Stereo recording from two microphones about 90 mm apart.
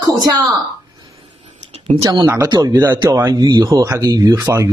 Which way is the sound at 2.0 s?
40° right (ahead or behind).